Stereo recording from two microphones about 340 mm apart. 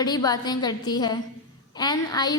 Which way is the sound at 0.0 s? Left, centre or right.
Centre.